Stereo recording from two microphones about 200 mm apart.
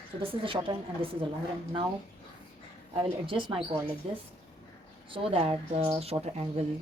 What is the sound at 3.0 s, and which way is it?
Speech, 25° right (ahead or behind).